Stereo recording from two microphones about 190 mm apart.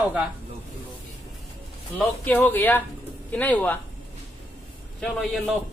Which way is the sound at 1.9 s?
10° left (ahead or behind).